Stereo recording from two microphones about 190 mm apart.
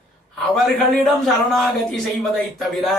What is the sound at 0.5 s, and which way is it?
A man's voice, centre (ahead or behind).